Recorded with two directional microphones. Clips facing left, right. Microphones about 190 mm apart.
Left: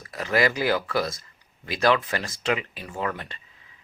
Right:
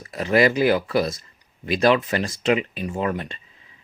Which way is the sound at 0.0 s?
25° right (ahead or behind).